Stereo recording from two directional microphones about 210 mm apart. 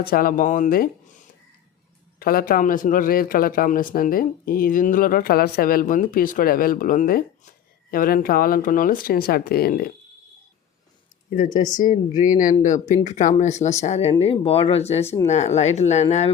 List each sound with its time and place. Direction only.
0.1 s a man's voice: 45° left (ahead or behind)
2.1 s a man's voice: 45° left (ahead or behind)
11.3 s speech: 40° left (ahead or behind)
11.5 s speech: 20° left (ahead or behind)
11.8 s speech: 40° left (ahead or behind)
15.0 s speech: 15° left (ahead or behind)
15.3 s speech: 30° left (ahead or behind)